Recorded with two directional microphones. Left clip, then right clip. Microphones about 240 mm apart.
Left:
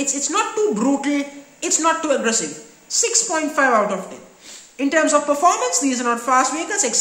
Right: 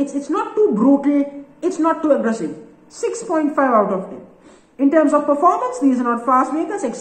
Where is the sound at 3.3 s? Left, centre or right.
Centre.